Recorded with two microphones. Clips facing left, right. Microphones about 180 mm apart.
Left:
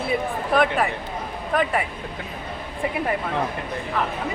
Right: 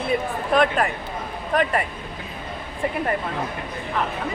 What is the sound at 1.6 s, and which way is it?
Speech, 5° left (ahead or behind).